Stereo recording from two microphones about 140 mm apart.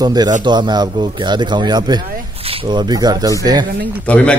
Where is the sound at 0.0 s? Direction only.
30° right (ahead or behind).